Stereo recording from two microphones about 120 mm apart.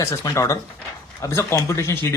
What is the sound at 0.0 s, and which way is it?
Speech, 25° left (ahead or behind).